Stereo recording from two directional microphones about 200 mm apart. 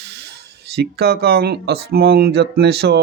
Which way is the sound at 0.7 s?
55° right (ahead or behind).